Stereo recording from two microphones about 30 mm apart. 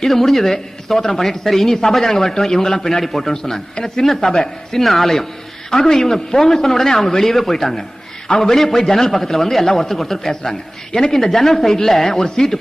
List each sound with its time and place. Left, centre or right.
0.0 s speech: centre
11.1 s speech: centre